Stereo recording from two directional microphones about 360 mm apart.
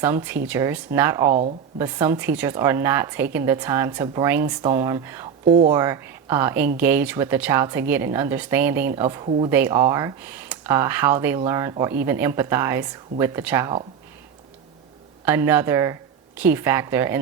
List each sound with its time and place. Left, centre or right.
0.0 s a woman's voice: centre
1.3 s speech: centre
1.8 s speech: centre
5.5 s speech: centre
5.7 s a woman's voice: centre
15.2 s speech: centre